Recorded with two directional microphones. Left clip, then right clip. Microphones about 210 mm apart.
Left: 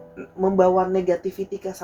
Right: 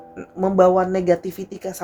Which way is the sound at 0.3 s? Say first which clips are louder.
Right 2 dB; 45° right (ahead or behind).